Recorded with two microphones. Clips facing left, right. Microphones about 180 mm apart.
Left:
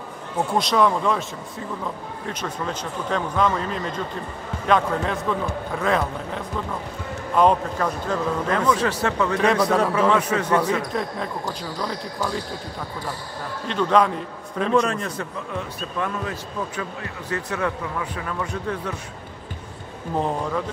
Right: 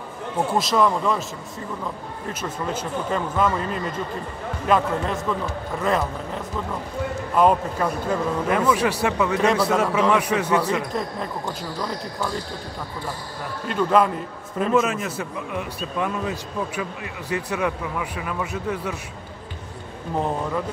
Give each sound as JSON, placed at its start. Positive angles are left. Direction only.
{"t": 0.6, "sound": "speech", "side_deg": 0}
{"t": 2.6, "sound": "a man's voice", "side_deg": -5}
{"t": 13.7, "sound": "a man's voice", "side_deg": -5}